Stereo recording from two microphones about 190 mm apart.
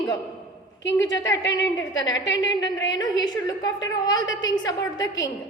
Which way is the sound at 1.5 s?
20° left (ahead or behind).